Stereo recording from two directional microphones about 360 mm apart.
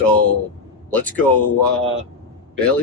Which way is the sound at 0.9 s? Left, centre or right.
Centre.